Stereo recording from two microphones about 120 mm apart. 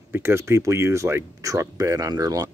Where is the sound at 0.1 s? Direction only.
20° right (ahead or behind).